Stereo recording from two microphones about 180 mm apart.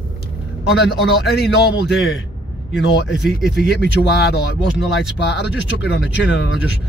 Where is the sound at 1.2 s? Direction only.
65° left (ahead or behind).